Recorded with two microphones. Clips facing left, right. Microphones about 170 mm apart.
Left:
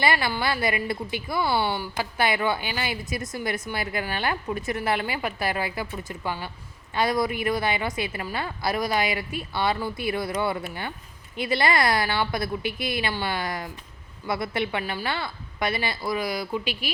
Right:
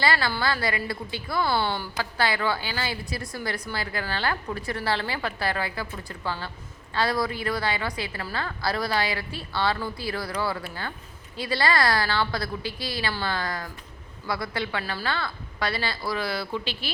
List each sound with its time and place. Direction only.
0.0 s a woman's voice: 20° left (ahead or behind)